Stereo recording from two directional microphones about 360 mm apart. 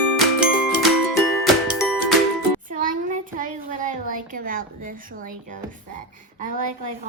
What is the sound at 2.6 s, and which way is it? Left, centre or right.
Music, right.